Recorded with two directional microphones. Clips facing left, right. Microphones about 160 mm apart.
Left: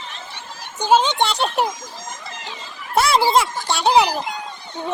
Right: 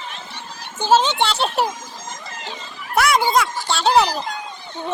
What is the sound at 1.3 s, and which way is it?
Speech, 5° right (ahead or behind).